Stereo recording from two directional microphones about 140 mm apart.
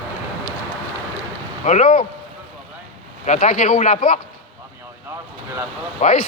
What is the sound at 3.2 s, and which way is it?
Speech, 60° left (ahead or behind).